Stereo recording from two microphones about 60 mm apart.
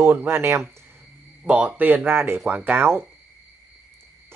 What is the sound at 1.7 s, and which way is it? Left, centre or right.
Speech, right.